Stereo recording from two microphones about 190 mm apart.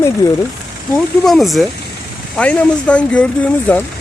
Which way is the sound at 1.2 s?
Centre (ahead or behind).